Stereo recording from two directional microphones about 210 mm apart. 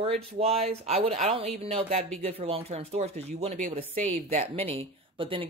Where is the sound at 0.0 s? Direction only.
30° right (ahead or behind).